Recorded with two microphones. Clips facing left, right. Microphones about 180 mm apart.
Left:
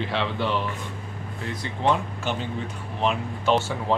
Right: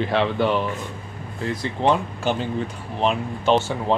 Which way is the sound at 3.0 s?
20° right (ahead or behind).